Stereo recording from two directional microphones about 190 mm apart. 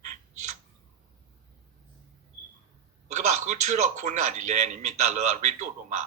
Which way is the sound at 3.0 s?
40° right (ahead or behind).